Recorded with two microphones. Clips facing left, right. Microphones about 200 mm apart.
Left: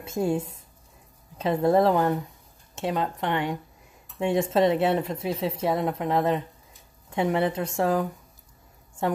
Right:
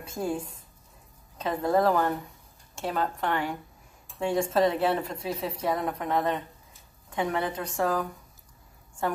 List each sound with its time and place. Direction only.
0.0 s speech: 25° left (ahead or behind)